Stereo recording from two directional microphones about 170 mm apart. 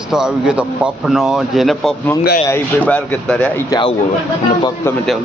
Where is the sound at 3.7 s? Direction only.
30° left (ahead or behind).